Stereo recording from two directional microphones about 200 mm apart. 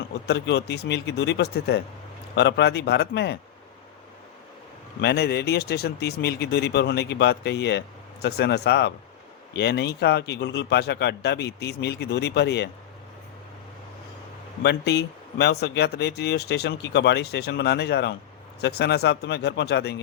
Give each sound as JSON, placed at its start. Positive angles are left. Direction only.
{"t": 0.3, "sound": "speech", "side_deg": 60}
{"t": 4.9, "sound": "speech", "side_deg": 55}
{"t": 14.6, "sound": "speech", "side_deg": 55}